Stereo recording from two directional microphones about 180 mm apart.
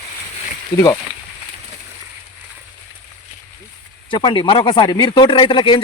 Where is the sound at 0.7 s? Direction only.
15° left (ahead or behind).